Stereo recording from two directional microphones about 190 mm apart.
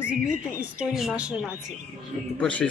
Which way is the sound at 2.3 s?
5° left (ahead or behind).